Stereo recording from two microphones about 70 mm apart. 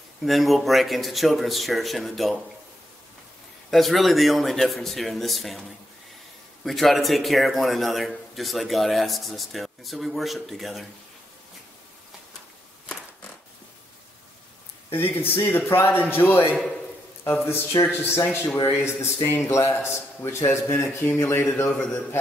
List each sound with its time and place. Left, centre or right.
0.2 s a man's voice: centre
3.7 s a man's voice: centre
14.9 s a man's voice: left
17.5 s a man's voice: left